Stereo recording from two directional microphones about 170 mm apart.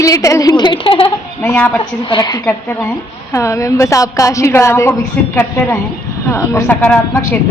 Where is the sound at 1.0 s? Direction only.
10° left (ahead or behind).